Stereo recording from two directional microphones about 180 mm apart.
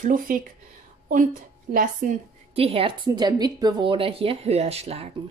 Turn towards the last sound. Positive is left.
turn(degrees=-35)  # may be behind; listen again after turning